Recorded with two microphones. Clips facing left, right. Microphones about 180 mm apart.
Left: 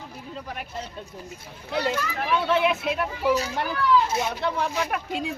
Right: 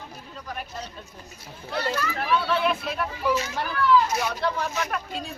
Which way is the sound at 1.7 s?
15° left (ahead or behind).